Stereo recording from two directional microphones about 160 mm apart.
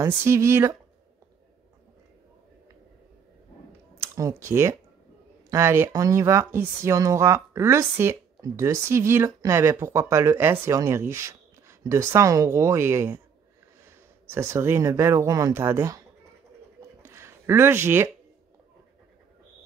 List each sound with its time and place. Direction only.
0.0 s speech: 15° right (ahead or behind)
4.0 s speech: 20° right (ahead or behind)
17.0 s a sound: 15° right (ahead or behind)